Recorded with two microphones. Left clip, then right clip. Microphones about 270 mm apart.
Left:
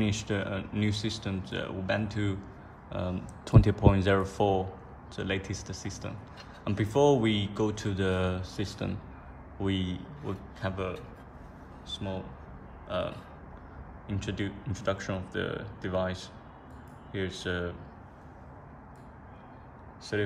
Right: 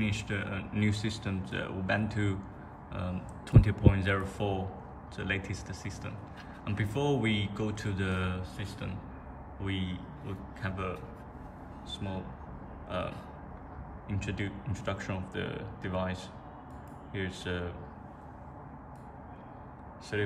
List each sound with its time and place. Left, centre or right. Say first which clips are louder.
0.0 s a man's voice: left 3 dB; centre
20.1 s speech: left 2 dB; centre